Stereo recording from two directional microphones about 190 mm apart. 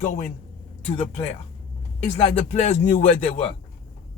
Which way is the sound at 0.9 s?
30° left (ahead or behind).